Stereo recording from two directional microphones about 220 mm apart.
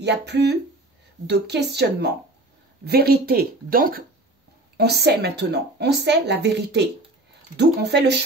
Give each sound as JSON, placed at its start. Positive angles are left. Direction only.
{"t": 0.0, "sound": "a woman's voice", "side_deg": -50}